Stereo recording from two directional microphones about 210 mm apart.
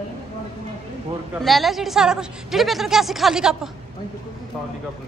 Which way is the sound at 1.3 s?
Centre (ahead or behind).